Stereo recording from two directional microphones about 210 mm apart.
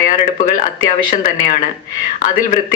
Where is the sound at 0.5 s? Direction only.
40° left (ahead or behind).